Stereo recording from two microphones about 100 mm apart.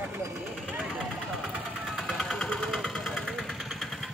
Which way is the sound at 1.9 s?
Centre (ahead or behind).